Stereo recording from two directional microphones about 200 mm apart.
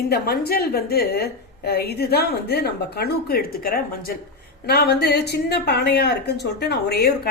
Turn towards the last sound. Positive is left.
turn(degrees=55)  # may be behind; listen again after turning